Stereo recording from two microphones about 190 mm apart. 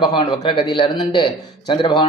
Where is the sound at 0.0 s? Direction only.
25° left (ahead or behind).